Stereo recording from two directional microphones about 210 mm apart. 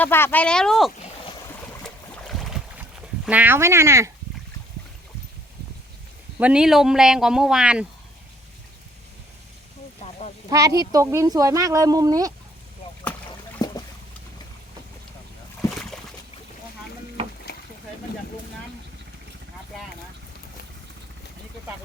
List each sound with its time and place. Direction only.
0.0 s speech: 10° left (ahead or behind)
1.8 s boat: centre (ahead or behind)
3.2 s speech: 10° right (ahead or behind)
6.4 s speech: 5° right (ahead or behind)
10.0 s a sound: 30° left (ahead or behind)
10.5 s speech: 15° right (ahead or behind)
13.6 s boat: 20° left (ahead or behind)
15.7 s a sound: centre (ahead or behind)
17.5 s rowboat: 50° left (ahead or behind)